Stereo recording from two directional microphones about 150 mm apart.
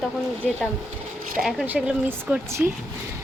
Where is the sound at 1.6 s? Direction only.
10° right (ahead or behind).